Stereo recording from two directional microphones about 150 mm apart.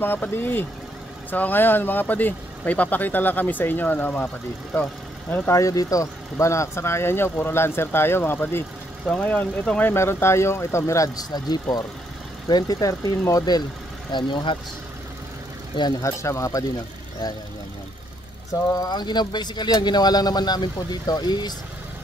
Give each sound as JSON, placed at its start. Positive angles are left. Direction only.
{"t": 0.0, "sound": "speech", "side_deg": 15}
{"t": 5.5, "sound": "speech", "side_deg": 20}
{"t": 15.7, "sound": "speech", "side_deg": 25}
{"t": 18.5, "sound": "speech", "side_deg": 25}